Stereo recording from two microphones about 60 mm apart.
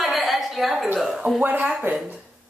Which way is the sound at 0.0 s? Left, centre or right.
Centre.